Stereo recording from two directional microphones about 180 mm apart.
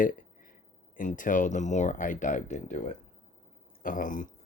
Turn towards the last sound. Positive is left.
turn(degrees=50)  # may be behind; listen again after turning